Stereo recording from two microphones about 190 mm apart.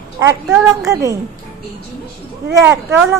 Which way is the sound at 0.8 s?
15° right (ahead or behind).